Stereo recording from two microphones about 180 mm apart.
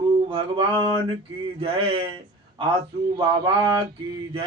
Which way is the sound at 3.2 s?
20° right (ahead or behind).